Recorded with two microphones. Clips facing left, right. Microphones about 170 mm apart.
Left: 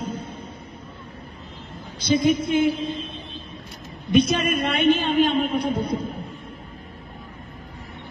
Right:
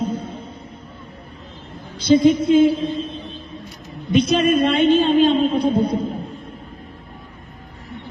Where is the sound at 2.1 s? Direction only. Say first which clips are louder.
Right 6 dB; 30° right (ahead or behind).